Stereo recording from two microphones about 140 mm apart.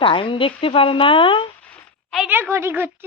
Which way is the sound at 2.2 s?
15° right (ahead or behind).